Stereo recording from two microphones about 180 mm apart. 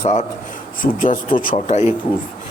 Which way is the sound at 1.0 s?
50° left (ahead or behind).